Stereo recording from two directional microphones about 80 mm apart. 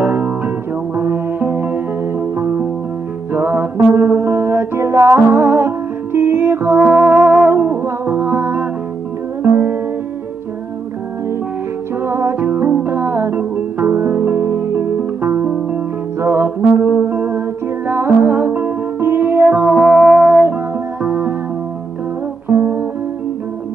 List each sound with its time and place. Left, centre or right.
0.0 s music: right
4.2 s music: right
6.8 s music: centre
12.0 s music: right
17.1 s humming: right
17.8 s music: right
19.7 s music: centre
20.1 s music: centre
22.6 s music: right